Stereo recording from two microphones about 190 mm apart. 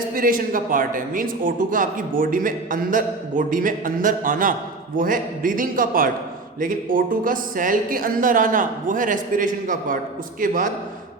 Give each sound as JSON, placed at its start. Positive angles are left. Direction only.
{"t": 0.1, "sound": "speech", "side_deg": -50}